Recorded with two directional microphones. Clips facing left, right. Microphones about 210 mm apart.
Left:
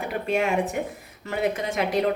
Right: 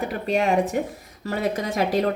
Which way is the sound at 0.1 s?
35° right (ahead or behind).